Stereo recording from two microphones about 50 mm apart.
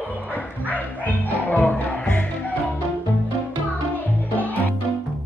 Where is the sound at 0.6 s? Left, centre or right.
Left.